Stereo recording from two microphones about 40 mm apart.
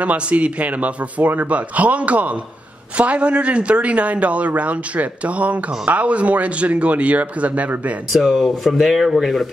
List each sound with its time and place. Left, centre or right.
0.0 s a man's voice: right
8.1 s speech: centre